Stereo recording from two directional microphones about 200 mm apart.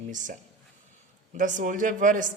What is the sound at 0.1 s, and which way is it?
A woman's voice, 40° right (ahead or behind).